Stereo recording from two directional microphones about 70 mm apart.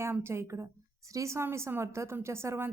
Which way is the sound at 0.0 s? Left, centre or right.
Right.